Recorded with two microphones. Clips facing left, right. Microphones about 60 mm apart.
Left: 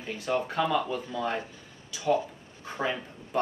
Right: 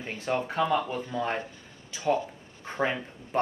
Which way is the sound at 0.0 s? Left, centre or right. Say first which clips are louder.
Even; right.